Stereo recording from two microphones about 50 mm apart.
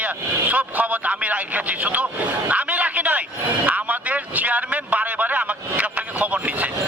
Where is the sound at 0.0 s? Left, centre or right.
Right.